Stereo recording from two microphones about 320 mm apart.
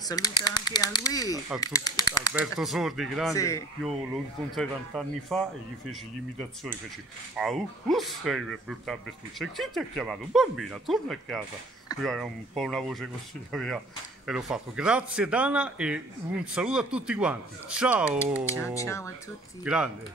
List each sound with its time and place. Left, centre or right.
0.0 s speech: centre
2.3 s speech: centre
7.3 s speech: centre
18.8 s speech: centre
19.6 s speech: centre